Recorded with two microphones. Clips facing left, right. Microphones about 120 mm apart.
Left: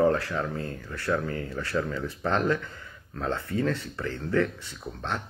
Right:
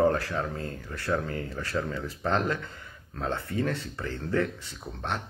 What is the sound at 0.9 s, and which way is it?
Speech, 25° right (ahead or behind).